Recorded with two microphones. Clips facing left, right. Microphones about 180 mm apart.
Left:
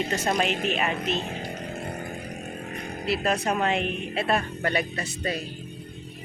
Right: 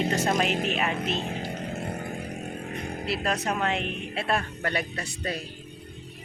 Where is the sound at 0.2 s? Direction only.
Centre (ahead or behind).